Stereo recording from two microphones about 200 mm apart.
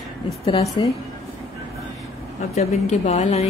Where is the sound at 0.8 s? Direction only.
20° left (ahead or behind).